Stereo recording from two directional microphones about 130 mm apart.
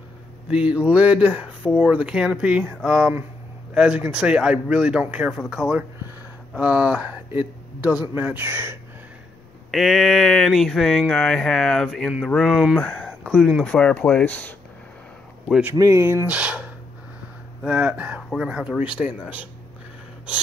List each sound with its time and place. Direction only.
0.5 s a man's voice: 10° right (ahead or behind)
9.7 s speech: centre (ahead or behind)
13.2 s speech: 5° left (ahead or behind)
15.7 s speech: 25° right (ahead or behind)
16.3 s a man's voice: 10° right (ahead or behind)